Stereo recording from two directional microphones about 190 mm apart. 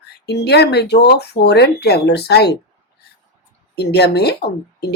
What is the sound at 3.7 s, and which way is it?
Speech, 60° left (ahead or behind).